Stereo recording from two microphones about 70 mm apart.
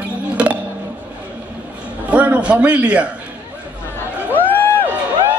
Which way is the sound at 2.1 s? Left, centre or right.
Centre.